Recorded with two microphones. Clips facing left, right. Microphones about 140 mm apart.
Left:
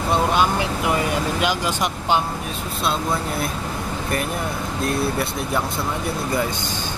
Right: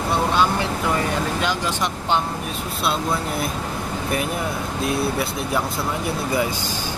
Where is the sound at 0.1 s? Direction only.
15° left (ahead or behind).